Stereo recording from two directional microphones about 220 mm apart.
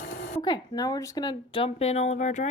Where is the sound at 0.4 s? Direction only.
20° left (ahead or behind).